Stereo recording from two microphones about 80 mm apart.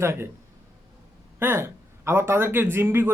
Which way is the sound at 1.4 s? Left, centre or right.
Right.